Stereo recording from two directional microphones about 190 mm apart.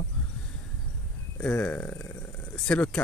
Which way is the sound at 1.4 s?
5° left (ahead or behind).